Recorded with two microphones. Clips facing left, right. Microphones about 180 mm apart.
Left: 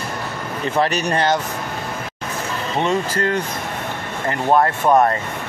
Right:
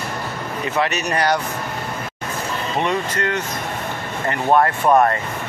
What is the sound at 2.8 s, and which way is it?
Speech, 30° left (ahead or behind).